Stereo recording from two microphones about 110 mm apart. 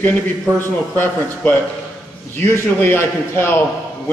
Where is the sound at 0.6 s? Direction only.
20° left (ahead or behind).